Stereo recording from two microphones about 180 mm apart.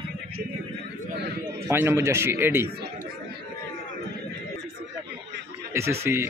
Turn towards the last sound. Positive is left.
turn(degrees=-15)  # may be behind; listen again after turning